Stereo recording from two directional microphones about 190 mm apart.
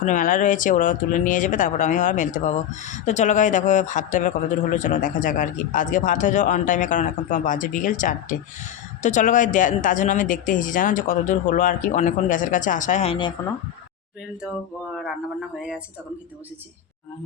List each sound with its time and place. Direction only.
0.0 s speech: 45° left (ahead or behind); by 13.3 s 30° left (ahead or behind)
14.9 s speech: centre (ahead or behind)